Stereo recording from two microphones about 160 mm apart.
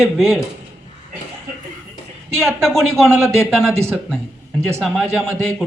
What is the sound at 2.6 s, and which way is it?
Speech, 5° left (ahead or behind).